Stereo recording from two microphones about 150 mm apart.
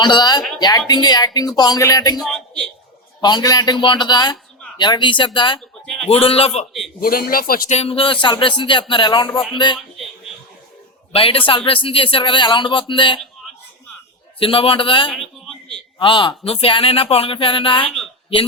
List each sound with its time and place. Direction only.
0.0 s speech: 30° left (ahead or behind)
2.2 s a man's voice: 5° left (ahead or behind)
3.2 s a man's voice: 30° left (ahead or behind)
5.5 s speech: 5° left (ahead or behind)
6.1 s a man's voice: 40° left (ahead or behind)
7.0 s a man's voice: 75° left (ahead or behind)
7.7 s a man's voice: 40° left (ahead or behind)
11.1 s a man's voice: 35° left (ahead or behind)
14.3 s a man's voice: 35° left (ahead or behind)
15.1 s a sound: centre (ahead or behind)
16.0 s a man's voice: 30° left (ahead or behind)